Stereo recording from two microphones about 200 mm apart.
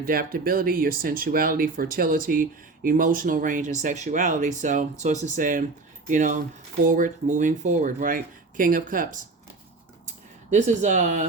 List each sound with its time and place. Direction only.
0.0 s speech: 45° right (ahead or behind)
10.5 s speech: 35° right (ahead or behind)